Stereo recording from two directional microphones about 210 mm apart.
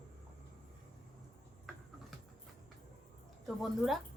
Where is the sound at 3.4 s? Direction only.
Centre (ahead or behind).